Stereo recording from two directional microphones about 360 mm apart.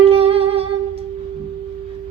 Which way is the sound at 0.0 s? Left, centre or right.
Centre.